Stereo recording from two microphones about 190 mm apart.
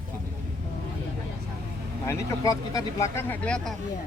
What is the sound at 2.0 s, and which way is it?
Speech, 20° left (ahead or behind).